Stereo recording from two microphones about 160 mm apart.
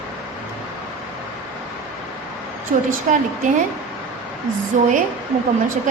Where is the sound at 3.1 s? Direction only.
55° right (ahead or behind).